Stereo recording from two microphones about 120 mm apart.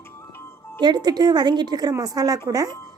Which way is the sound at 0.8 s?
35° right (ahead or behind).